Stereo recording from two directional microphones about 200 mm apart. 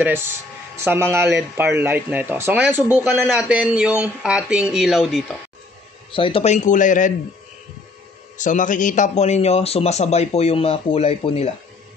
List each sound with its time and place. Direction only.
0.0 s speech: 10° right (ahead or behind)
6.1 s speech: 25° left (ahead or behind)
8.4 s speech: 40° left (ahead or behind)